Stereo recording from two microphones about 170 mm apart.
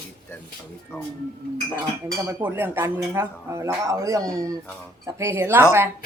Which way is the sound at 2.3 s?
10° right (ahead or behind).